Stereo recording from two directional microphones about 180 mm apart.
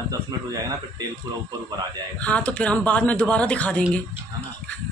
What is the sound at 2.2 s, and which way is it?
Speech, 5° left (ahead or behind).